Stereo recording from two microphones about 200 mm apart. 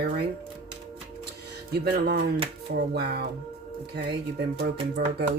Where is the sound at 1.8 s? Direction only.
50° right (ahead or behind).